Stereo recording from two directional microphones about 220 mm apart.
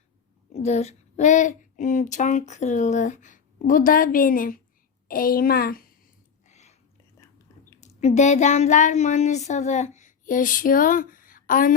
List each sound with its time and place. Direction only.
0.5 s speech: 30° left (ahead or behind)
6.5 s a sound: 30° left (ahead or behind)
7.8 s speech: 30° left (ahead or behind)